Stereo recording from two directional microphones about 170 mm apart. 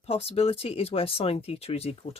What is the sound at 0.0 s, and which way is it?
Speech, 35° left (ahead or behind).